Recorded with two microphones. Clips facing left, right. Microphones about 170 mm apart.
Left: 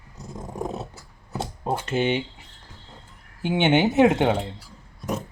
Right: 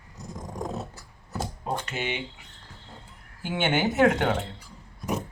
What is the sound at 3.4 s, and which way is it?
Speech, 20° left (ahead or behind).